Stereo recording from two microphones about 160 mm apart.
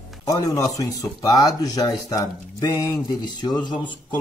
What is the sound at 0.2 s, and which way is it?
Speech, 20° left (ahead or behind).